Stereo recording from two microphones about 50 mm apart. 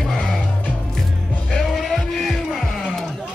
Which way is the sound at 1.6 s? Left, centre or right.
Centre.